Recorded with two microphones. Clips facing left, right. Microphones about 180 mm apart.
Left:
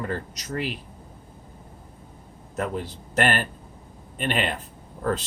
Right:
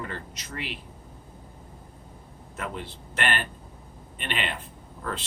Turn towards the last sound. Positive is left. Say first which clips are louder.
# left 8 dB
turn(degrees=40)  # may be behind; listen again after turning